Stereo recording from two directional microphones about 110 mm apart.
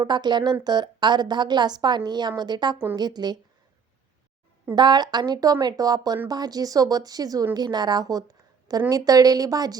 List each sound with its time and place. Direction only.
0.0 s a woman's voice: 40° right (ahead or behind)
4.7 s a woman's voice: 40° right (ahead or behind)